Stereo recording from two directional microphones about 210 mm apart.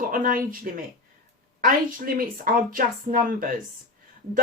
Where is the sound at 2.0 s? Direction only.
40° right (ahead or behind).